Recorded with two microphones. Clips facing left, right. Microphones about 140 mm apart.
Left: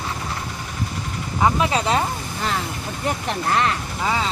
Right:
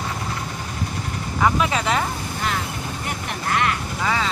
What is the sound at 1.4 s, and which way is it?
Speech, 30° left (ahead or behind).